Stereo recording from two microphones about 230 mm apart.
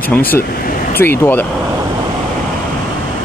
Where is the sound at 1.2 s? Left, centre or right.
Centre.